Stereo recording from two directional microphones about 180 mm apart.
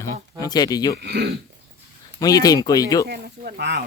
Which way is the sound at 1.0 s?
70° right (ahead or behind).